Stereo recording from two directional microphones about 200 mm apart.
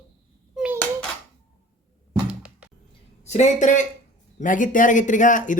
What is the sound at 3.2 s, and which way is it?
Speech, 35° left (ahead or behind).